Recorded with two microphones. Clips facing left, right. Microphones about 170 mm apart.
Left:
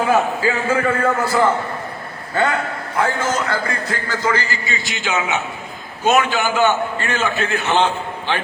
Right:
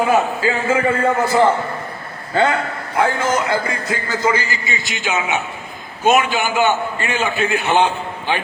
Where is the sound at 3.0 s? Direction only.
15° right (ahead or behind).